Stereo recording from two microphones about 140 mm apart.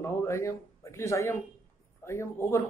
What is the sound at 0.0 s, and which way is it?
Speech, 20° left (ahead or behind).